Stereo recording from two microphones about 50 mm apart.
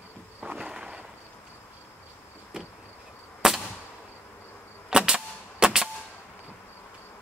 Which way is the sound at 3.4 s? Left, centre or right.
Centre.